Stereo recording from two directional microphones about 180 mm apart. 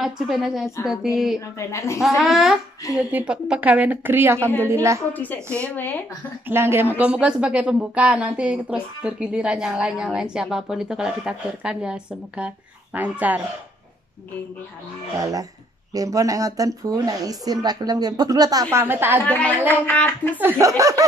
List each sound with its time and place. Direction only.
0.0 s speech: centre (ahead or behind)
1.6 s a woman's voice: 15° left (ahead or behind)
2.0 s speech: centre (ahead or behind)
5.1 s a woman's voice: 10° left (ahead or behind)
6.4 s speech: 15° right (ahead or behind)
15.1 s speech: 20° right (ahead or behind)
19.2 s a woman's voice: 5° left (ahead or behind)
20.3 s speech: 15° right (ahead or behind)